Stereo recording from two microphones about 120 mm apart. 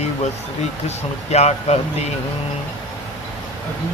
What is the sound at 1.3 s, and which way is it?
Speech, 65° left (ahead or behind).